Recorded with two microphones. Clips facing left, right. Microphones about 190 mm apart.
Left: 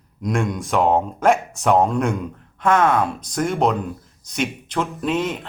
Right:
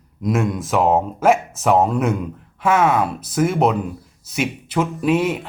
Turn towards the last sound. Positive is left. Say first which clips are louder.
# right 4 dB
turn(degrees=-10)  # may be behind; listen again after turning